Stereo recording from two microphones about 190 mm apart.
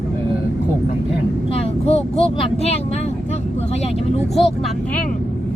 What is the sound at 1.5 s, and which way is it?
Speech, 30° left (ahead or behind).